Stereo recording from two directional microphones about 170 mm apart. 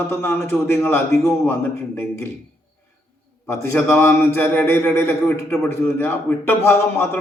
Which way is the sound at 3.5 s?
15° left (ahead or behind).